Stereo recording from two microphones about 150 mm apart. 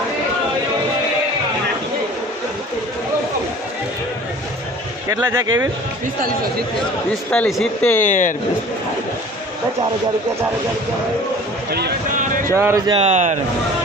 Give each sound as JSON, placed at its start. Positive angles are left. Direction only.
{"t": 5.0, "sound": "speech", "side_deg": -20}
{"t": 7.3, "sound": "speech", "side_deg": 5}
{"t": 8.0, "sound": "speech", "side_deg": 55}
{"t": 11.7, "sound": "speech", "side_deg": -90}
{"t": 12.5, "sound": "speech", "side_deg": -20}
{"t": 12.9, "sound": "speech", "side_deg": -45}